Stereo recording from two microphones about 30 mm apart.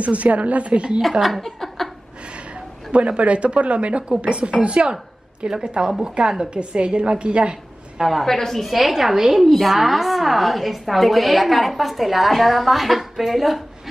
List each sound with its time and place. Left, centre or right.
0.0 s a woman's voice: right
1.4 s a sound: centre
2.3 s a woman's voice: right
8.0 s a woman's voice: centre
8.3 s a woman's voice: centre
8.7 s a woman's voice: centre